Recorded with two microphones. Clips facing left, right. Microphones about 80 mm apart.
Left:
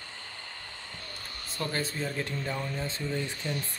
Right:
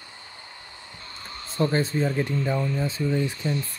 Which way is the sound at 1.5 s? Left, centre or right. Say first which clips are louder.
Right 10 dB; right.